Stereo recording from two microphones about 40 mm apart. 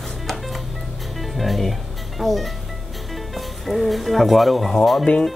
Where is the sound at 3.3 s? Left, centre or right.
Centre.